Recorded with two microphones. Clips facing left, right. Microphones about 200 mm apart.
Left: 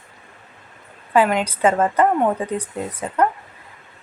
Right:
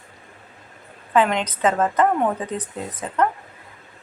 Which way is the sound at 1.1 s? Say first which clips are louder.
Left 2 dB; 10° left (ahead or behind).